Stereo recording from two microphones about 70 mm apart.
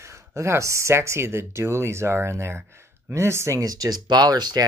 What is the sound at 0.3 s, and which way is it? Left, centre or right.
Speech, right.